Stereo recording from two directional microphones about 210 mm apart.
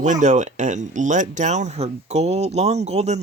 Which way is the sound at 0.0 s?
35° right (ahead or behind).